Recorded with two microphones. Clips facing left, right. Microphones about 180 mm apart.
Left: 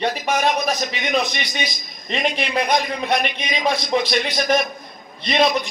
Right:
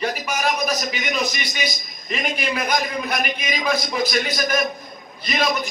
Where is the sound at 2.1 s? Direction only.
30° left (ahead or behind).